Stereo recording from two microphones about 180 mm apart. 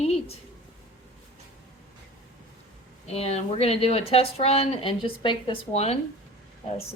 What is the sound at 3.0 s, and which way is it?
Speech, 35° left (ahead or behind).